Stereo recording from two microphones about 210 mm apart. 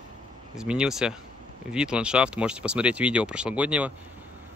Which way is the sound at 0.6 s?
5° right (ahead or behind).